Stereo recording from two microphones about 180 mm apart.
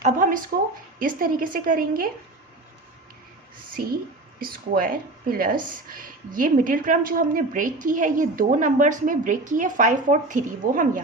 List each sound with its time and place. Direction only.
0.0 s speech: 45° right (ahead or behind)
4.4 s speech: 55° right (ahead or behind)